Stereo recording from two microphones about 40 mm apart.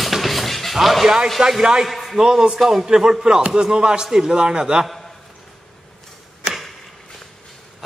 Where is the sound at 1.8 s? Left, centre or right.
Centre.